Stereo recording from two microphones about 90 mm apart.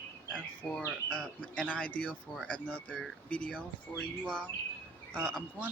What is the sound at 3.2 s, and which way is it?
Speech, 15° left (ahead or behind).